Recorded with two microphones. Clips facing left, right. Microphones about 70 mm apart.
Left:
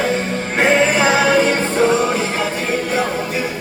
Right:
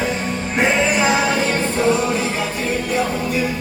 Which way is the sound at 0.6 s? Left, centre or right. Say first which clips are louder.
Left 3 dB; left.